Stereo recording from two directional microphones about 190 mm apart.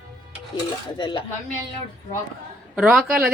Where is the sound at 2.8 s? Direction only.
Centre (ahead or behind).